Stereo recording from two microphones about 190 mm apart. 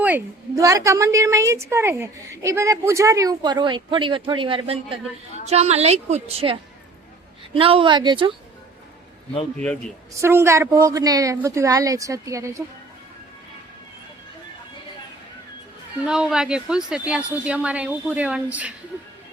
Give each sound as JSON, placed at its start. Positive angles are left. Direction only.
{"t": 0.0, "sound": "a woman's voice", "side_deg": -15}
{"t": 10.2, "sound": "a woman's voice", "side_deg": -15}
{"t": 16.0, "sound": "a woman's voice", "side_deg": -5}